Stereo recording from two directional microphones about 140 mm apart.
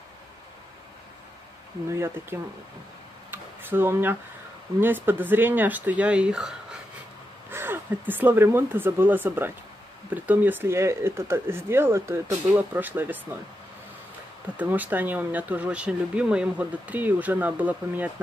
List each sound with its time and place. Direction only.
1.9 s speech: 20° right (ahead or behind)
3.3 s a sound: 15° right (ahead or behind)
4.7 s speech: 15° right (ahead or behind)
7.5 s speech: 15° right (ahead or behind)
14.6 s speech: 10° right (ahead or behind)